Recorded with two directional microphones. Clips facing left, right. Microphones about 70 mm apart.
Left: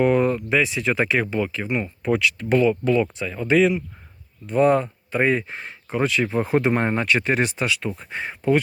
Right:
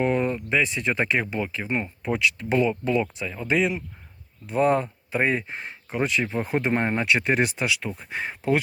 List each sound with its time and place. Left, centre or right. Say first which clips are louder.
0.0 s speech: left 5 dB; centre
1.6 s speech: left 2 dB; right
2.0 s speech: left 6 dB; centre
2.6 s speech: left 4 dB; centre
4.7 s speech: left 3 dB; centre
8.4 s speech: left 4 dB; centre